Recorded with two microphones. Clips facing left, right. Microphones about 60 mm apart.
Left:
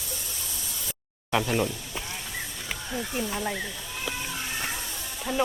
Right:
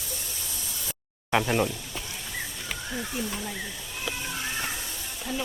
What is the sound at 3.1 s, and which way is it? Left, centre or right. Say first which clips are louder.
Speech: left 2 dB; left.